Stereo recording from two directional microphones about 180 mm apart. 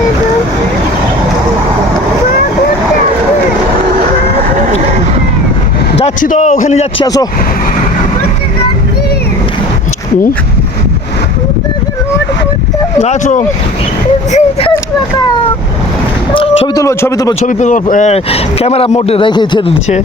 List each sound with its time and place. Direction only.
6.0 s a man's voice: 45° left (ahead or behind)
7.0 s speech: 20° left (ahead or behind)
13.0 s speech: 40° left (ahead or behind)
14.3 s a sound: 30° left (ahead or behind)
16.3 s a sound: 30° left (ahead or behind)
16.8 s speech: 15° left (ahead or behind)
17.4 s speech: 45° left (ahead or behind); by 19.7 s 25° left (ahead or behind)